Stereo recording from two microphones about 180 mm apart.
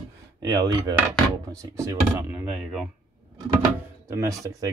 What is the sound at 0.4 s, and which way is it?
Speech, 20° right (ahead or behind).